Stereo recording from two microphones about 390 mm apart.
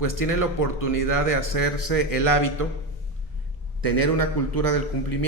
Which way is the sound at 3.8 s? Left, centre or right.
Left.